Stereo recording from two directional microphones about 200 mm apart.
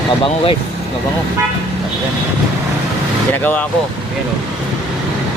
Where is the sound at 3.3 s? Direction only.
10° left (ahead or behind).